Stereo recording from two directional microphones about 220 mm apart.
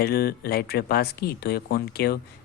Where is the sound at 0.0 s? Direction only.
45° left (ahead or behind).